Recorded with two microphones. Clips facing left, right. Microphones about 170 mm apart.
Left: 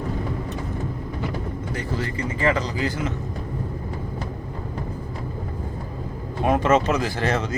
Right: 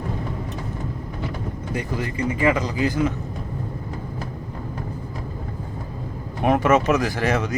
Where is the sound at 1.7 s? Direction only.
15° right (ahead or behind).